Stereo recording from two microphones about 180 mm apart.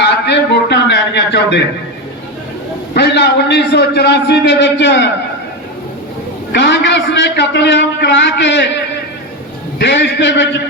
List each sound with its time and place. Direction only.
0.0 s a sound: 70° left (ahead or behind)
2.9 s a man's voice: 65° left (ahead or behind)
6.5 s a man's voice: 70° left (ahead or behind)
9.7 s a man's voice: 70° left (ahead or behind)